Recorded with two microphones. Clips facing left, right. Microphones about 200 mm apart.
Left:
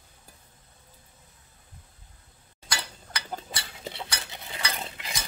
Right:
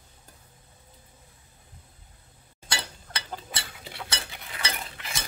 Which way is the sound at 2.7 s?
25° right (ahead or behind).